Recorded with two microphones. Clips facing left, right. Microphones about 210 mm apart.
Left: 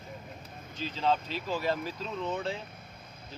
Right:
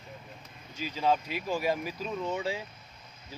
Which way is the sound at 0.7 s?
10° right (ahead or behind).